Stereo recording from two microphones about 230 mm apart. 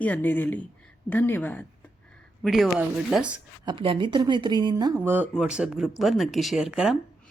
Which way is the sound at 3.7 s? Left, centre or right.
Right.